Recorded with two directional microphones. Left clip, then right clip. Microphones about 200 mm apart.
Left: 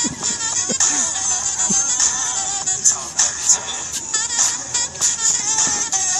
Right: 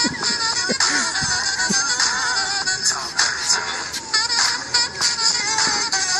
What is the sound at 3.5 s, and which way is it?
Music, 35° right (ahead or behind).